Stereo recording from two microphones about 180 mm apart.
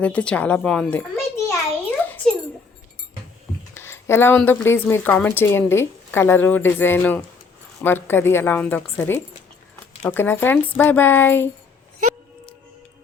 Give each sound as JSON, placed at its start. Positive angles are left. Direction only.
{"t": 0.0, "sound": "a child's voice", "side_deg": 5}
{"t": 2.0, "sound": "a sound", "side_deg": 10}
{"t": 3.8, "sound": "a woman's voice", "side_deg": 15}